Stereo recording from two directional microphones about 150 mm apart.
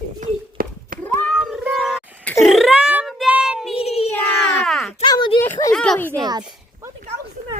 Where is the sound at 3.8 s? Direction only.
45° left (ahead or behind).